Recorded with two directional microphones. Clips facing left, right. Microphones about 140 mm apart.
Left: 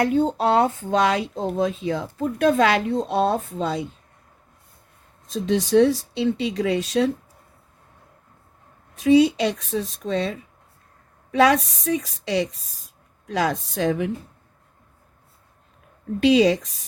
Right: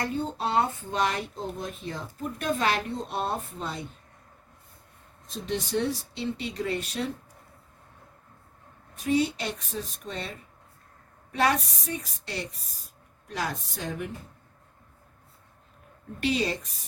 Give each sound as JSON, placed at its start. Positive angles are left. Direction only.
{"t": 0.3, "sound": "speech", "side_deg": 90}
{"t": 5.3, "sound": "speech", "side_deg": 90}
{"t": 9.0, "sound": "speech", "side_deg": 90}
{"t": 16.2, "sound": "speech", "side_deg": 90}